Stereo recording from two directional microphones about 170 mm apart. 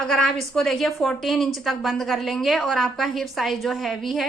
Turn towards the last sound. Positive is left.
turn(degrees=0)  # may be behind; listen again after turning